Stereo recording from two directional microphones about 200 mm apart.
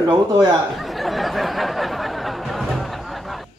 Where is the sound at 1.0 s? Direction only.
Centre (ahead or behind).